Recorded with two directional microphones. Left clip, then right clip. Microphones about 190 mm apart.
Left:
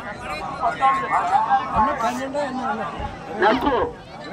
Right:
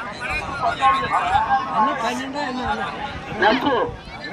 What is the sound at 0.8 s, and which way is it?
A man's voice, 30° right (ahead or behind).